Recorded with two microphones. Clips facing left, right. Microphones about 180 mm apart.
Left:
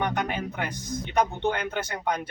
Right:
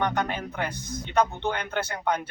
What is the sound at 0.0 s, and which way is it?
Speech, 15° left (ahead or behind).